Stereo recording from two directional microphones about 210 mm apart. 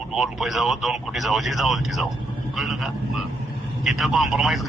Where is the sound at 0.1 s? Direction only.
Centre (ahead or behind).